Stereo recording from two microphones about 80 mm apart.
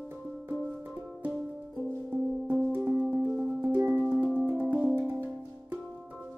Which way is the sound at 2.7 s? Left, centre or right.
Right.